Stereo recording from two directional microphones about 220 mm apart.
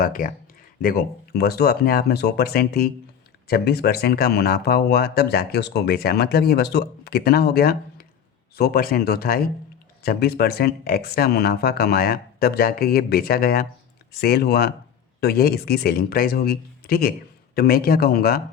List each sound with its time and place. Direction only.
0.0 s speech: 40° left (ahead or behind)